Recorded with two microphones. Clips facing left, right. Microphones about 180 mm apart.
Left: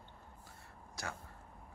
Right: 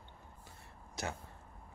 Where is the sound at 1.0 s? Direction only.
20° right (ahead or behind).